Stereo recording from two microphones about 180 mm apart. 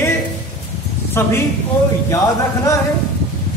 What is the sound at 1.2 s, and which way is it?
Speech, 10° left (ahead or behind).